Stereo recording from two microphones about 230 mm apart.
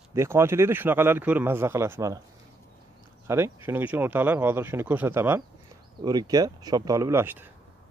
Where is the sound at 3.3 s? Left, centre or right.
Centre.